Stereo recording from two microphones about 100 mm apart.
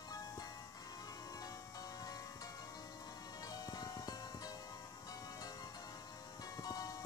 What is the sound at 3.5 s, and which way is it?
Music, 40° left (ahead or behind).